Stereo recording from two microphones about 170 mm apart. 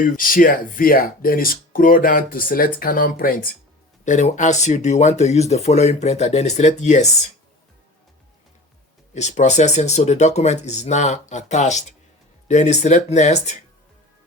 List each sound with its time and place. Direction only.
0.0 s speech: 55° left (ahead or behind)
4.0 s speech: 45° left (ahead or behind)
9.1 s speech: 45° left (ahead or behind)